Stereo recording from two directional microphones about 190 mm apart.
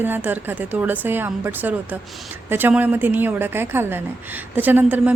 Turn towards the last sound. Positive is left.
turn(degrees=-10)  # may be behind; listen again after turning